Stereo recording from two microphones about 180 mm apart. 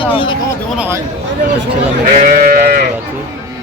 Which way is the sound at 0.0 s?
30° left (ahead or behind).